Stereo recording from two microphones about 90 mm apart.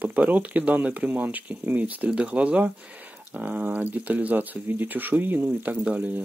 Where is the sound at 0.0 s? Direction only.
20° right (ahead or behind).